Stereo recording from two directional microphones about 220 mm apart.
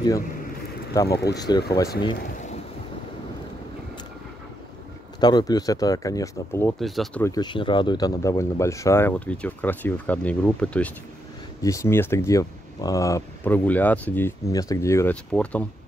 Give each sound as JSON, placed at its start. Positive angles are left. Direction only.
{"t": 1.0, "sound": "speech", "side_deg": 45}
{"t": 1.3, "sound": "speech", "side_deg": 15}
{"t": 5.2, "sound": "speech", "side_deg": 20}
{"t": 6.8, "sound": "speech", "side_deg": 0}
{"t": 7.2, "sound": "speech", "side_deg": 20}